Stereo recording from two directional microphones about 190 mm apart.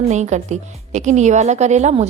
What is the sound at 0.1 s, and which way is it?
A woman's voice, 35° right (ahead or behind).